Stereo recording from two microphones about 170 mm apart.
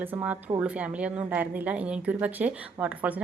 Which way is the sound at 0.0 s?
10° right (ahead or behind).